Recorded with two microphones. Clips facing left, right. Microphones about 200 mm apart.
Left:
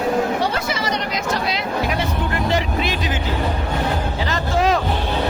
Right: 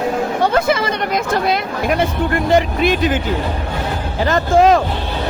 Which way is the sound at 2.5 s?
55° right (ahead or behind).